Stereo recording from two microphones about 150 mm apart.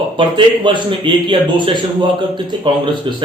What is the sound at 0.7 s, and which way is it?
Speech, 30° right (ahead or behind).